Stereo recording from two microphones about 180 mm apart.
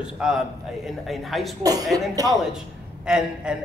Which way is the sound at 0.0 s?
Centre (ahead or behind).